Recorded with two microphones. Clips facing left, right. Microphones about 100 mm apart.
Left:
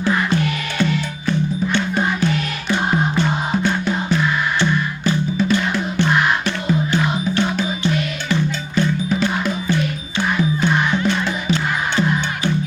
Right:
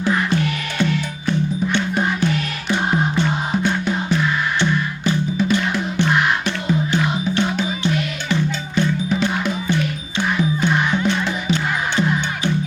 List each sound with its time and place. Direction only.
3.5 s music: 15° right (ahead or behind)
5.0 s music: 15° right (ahead or behind)
8.3 s music: 20° right (ahead or behind)